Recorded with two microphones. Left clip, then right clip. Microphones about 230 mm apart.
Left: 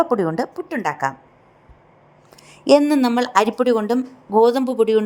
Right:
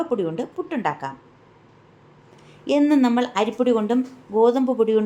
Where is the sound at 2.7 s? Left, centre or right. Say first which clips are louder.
Left 4 dB; left.